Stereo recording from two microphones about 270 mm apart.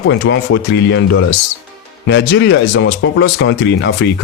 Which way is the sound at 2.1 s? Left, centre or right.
Left.